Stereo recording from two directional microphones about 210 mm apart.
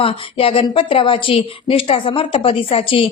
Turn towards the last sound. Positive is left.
turn(degrees=25)  # may be behind; listen again after turning